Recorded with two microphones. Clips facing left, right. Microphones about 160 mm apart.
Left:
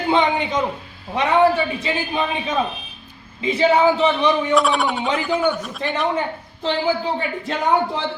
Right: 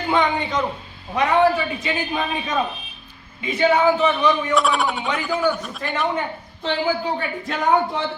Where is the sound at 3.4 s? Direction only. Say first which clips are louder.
Left 2 dB; 30° left (ahead or behind).